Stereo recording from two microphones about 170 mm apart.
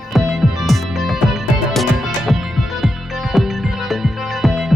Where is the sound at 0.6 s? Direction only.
Centre (ahead or behind).